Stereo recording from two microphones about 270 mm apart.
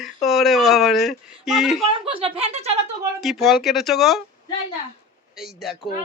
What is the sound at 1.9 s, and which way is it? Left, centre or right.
Speech, centre.